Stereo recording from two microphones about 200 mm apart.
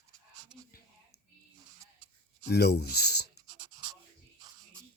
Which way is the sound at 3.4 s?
20° right (ahead or behind).